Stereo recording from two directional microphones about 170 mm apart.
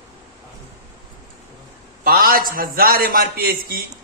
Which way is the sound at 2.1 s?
60° right (ahead or behind).